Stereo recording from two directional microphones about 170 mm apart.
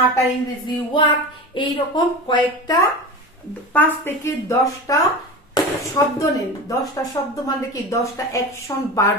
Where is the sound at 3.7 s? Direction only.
10° left (ahead or behind).